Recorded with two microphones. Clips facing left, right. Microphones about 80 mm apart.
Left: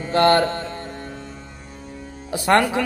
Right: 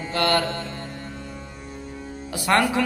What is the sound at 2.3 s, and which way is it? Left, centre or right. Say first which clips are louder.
Mantra: left 3 dB; left.